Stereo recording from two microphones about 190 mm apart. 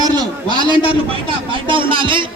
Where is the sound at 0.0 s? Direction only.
20° right (ahead or behind).